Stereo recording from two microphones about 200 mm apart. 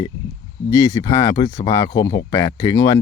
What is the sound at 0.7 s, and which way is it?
Speech, 15° left (ahead or behind).